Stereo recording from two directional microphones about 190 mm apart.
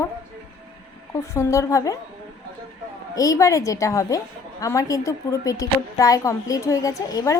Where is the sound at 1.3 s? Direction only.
15° left (ahead or behind).